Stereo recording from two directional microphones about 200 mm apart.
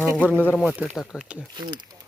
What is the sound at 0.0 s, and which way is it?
Speech, 5° right (ahead or behind).